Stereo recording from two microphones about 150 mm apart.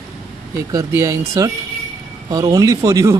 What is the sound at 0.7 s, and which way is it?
Speech, 20° right (ahead or behind).